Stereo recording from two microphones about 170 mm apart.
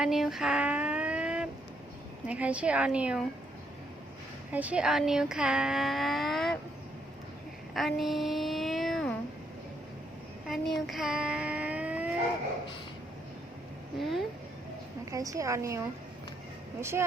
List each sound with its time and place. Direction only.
0.0 s a sound: centre (ahead or behind)
2.2 s a woman's voice: 5° right (ahead or behind)
4.5 s speech: 10° right (ahead or behind)
7.7 s a sound: centre (ahead or behind)
10.4 s child singing: centre (ahead or behind)
14.0 s speech: centre (ahead or behind)
15.1 s a woman's voice: 20° right (ahead or behind)